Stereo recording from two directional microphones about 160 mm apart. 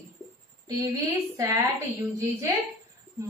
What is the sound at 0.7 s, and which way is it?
Speech, 20° right (ahead or behind).